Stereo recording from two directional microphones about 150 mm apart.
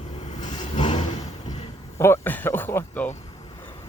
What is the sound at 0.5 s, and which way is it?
Vehicle, 35° left (ahead or behind).